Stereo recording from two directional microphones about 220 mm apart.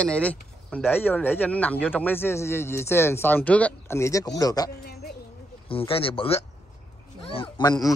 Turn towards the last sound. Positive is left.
turn(degrees=20)  # may be behind; listen again after turning